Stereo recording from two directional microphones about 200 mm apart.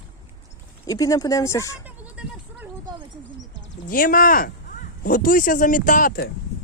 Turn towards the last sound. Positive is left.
turn(degrees=50)  # may be behind; listen again after turning